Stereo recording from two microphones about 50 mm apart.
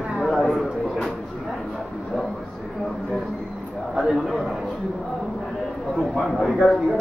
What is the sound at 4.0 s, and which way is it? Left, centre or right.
Speech, centre.